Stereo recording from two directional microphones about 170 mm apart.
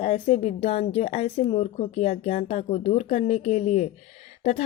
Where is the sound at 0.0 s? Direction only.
40° left (ahead or behind).